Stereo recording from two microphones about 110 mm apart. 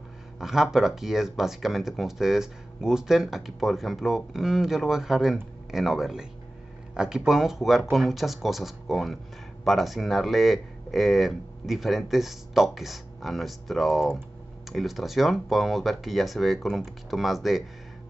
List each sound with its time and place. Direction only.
0.4 s speech: 5° right (ahead or behind)